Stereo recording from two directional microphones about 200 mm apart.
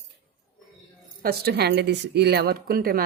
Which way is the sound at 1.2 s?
50° right (ahead or behind).